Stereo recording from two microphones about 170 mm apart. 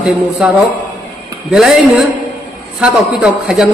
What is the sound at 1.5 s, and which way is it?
Speech, centre (ahead or behind).